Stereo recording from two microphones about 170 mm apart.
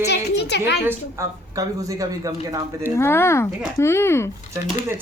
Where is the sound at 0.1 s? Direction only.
85° left.